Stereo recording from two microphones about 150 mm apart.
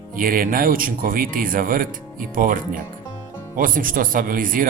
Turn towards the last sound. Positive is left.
turn(degrees=-65)  # may be behind; listen again after turning